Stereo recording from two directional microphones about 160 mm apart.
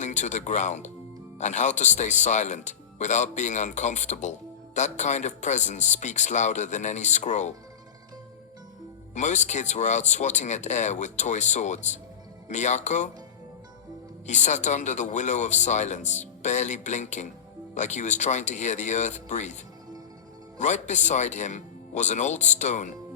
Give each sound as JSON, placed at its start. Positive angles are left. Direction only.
{"t": 0.0, "sound": "speech", "side_deg": 50}
{"t": 9.1, "sound": "speech", "side_deg": 50}
{"t": 14.3, "sound": "speech", "side_deg": 50}
{"t": 20.6, "sound": "speech", "side_deg": 50}